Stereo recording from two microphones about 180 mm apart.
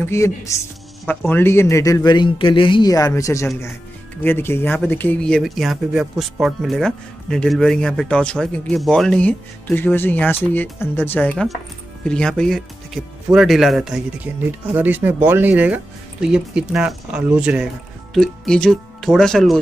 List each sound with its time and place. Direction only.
0.0 s a man's voice: 15° left (ahead or behind)